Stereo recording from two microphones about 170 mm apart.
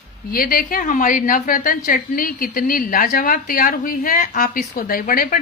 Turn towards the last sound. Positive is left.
turn(degrees=55)  # may be behind; listen again after turning